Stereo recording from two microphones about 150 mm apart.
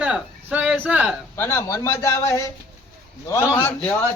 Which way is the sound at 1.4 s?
20° left (ahead or behind).